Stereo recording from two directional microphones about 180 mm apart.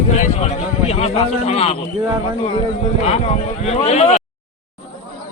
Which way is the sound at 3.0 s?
35° left (ahead or behind).